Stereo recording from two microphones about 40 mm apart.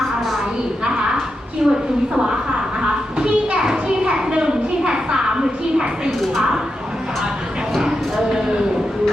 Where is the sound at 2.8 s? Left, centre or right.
Right.